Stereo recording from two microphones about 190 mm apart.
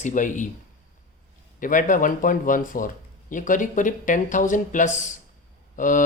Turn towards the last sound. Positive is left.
turn(degrees=45)  # may be behind; listen again after turning